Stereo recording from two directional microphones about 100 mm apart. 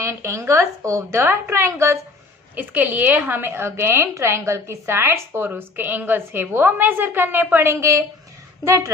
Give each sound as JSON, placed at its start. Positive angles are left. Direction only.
{"t": 0.0, "sound": "a woman's voice", "side_deg": -30}
{"t": 2.6, "sound": "a woman's voice", "side_deg": -20}